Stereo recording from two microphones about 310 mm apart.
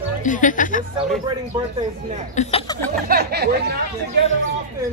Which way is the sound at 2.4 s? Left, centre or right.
Centre.